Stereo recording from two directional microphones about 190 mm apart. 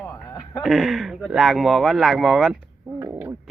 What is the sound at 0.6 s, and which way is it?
Speech, centre (ahead or behind).